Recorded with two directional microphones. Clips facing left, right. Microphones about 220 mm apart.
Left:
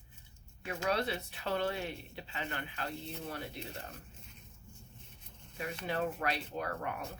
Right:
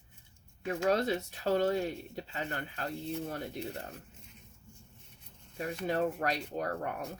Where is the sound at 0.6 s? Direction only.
45° right (ahead or behind).